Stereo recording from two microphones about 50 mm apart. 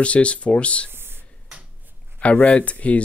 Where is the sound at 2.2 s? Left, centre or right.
Left.